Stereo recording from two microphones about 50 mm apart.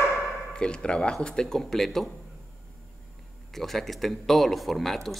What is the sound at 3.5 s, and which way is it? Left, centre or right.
Speech, centre.